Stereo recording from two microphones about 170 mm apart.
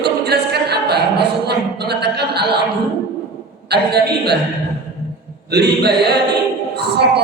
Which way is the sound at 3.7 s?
75° right (ahead or behind).